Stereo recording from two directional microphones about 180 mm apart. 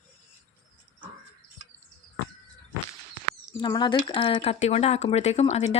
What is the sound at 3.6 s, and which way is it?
Speech, 25° left (ahead or behind).